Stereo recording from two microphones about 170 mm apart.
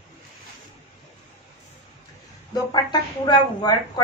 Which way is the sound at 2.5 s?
25° left (ahead or behind).